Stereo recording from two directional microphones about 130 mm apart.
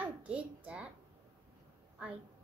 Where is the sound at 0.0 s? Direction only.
10° right (ahead or behind).